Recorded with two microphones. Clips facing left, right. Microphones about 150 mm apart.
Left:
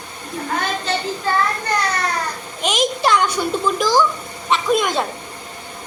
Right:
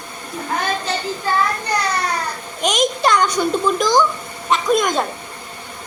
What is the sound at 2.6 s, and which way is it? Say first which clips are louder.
A child's voice: right 1 dB; 5° left (ahead or behind).